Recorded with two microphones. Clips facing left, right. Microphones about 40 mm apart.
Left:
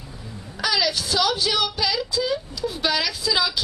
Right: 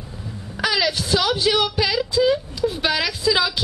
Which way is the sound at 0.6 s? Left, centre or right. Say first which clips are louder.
Right 2 dB; right.